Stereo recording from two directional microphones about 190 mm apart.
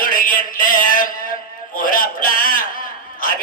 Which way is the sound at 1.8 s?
45° left (ahead or behind).